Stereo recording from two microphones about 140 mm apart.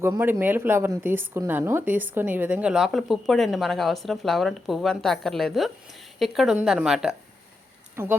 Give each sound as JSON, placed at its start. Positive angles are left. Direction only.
{"t": 0.2, "sound": "speech", "side_deg": -15}
{"t": 8.0, "sound": "speech", "side_deg": -15}